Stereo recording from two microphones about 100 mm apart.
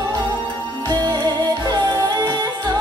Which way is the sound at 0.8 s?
45° right (ahead or behind).